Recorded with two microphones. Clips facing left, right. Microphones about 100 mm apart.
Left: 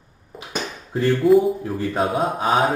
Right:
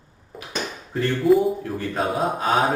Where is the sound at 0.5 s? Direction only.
5° left (ahead or behind).